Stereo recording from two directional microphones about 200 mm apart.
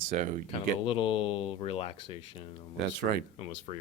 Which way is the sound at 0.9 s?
25° left (ahead or behind).